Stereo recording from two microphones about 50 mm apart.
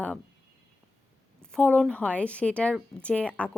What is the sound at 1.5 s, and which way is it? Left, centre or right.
Speech, left.